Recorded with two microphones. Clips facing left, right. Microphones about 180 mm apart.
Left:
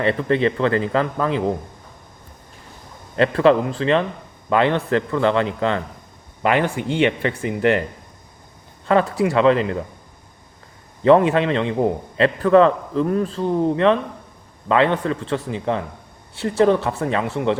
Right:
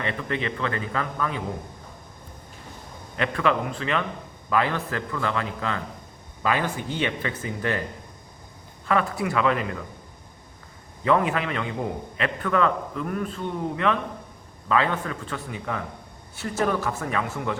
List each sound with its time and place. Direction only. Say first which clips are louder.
0.0 s a man's voice: left 10 dB; 35° left (ahead or behind)
3.2 s a man's voice: left 9 dB; 30° left (ahead or behind)
6.4 s speech: left 6 dB; 65° left (ahead or behind)
8.9 s speech: left 7 dB; 30° left (ahead or behind)
11.0 s a man's voice: left 9 dB; 30° left (ahead or behind)